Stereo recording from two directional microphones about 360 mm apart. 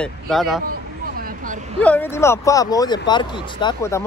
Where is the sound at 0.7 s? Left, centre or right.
Right.